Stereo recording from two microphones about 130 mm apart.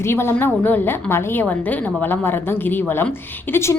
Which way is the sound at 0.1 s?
20° left (ahead or behind).